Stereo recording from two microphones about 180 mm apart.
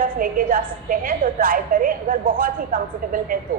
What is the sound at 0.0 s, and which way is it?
A woman's voice, 50° right (ahead or behind).